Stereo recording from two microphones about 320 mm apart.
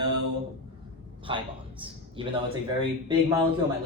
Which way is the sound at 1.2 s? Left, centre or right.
Centre.